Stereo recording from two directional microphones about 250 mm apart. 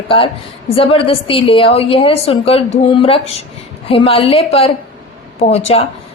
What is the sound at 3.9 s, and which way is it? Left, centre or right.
A woman's voice, left.